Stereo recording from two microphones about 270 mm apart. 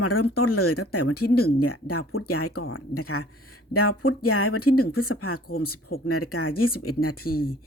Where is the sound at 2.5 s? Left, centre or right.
Left.